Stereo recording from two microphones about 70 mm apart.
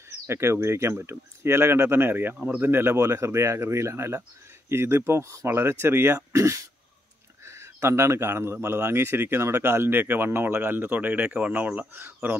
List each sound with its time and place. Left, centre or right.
0.1 s speech: right